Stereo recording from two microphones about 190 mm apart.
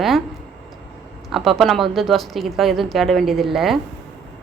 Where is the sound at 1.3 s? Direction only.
Centre (ahead or behind).